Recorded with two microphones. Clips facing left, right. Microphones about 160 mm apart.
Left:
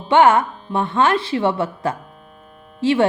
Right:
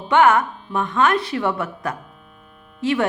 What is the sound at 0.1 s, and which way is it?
Speech, 30° left (ahead or behind).